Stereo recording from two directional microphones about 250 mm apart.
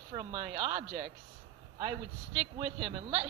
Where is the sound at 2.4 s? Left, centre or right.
Centre.